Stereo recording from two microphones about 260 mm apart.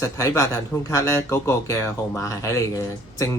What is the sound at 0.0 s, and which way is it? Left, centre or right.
Speech, centre.